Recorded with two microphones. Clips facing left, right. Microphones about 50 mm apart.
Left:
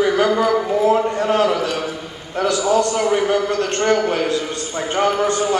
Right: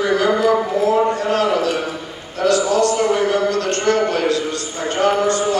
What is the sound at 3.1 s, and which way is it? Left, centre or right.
A man's voice, left.